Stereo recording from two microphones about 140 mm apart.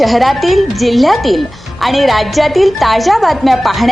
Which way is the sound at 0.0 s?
Centre (ahead or behind).